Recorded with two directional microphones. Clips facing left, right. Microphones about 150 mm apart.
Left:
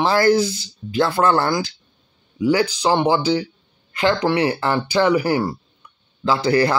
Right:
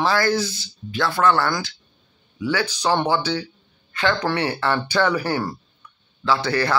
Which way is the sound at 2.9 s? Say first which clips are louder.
Left 4 dB; 15° left (ahead or behind).